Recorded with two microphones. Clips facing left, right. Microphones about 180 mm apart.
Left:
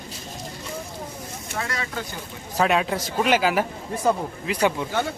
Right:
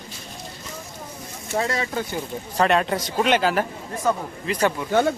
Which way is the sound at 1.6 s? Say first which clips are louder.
Right 6 dB; 25° right (ahead or behind).